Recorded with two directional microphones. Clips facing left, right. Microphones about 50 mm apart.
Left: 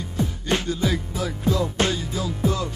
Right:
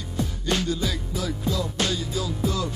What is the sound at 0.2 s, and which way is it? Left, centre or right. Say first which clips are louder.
Music: left 2 dB; left.